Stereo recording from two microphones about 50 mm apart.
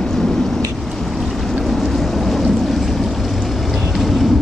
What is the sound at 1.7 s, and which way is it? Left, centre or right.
Vehicle, centre.